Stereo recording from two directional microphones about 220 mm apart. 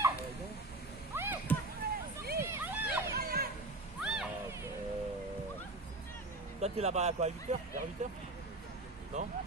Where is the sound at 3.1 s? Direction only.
45° right (ahead or behind).